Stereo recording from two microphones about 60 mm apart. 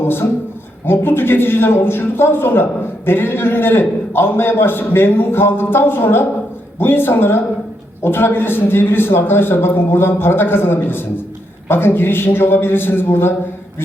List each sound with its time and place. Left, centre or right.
0.0 s a man's voice: left